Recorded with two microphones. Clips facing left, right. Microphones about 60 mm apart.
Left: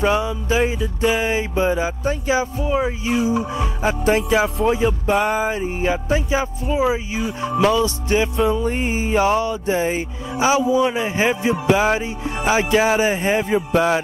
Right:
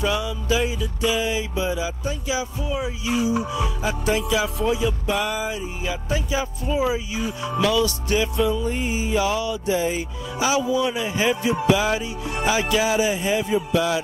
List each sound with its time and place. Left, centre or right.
0.0 s music: left
4.1 s music: left
4.6 s music: left
8.6 s music: left